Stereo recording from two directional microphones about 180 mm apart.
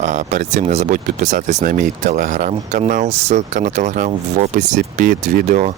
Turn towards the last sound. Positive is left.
turn(degrees=-40)  # may be behind; listen again after turning